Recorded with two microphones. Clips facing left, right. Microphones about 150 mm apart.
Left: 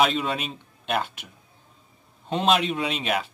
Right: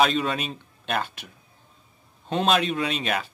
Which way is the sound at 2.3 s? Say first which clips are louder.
Even; 20° left (ahead or behind).